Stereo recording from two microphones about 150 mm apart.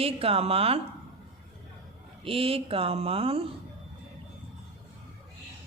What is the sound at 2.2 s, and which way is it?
A woman's voice, 40° right (ahead or behind).